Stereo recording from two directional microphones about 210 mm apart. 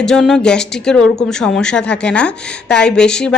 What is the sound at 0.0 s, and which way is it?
Speech, centre (ahead or behind).